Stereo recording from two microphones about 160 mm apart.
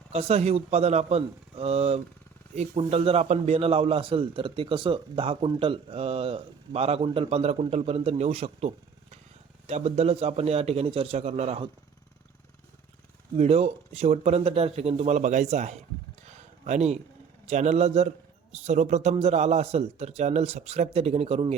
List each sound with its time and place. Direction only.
0.1 s a man's voice: 40° right (ahead or behind)
13.3 s a man's voice: 40° right (ahead or behind)
16.3 s a sound: 45° right (ahead or behind)
17.4 s a man's voice: 45° right (ahead or behind)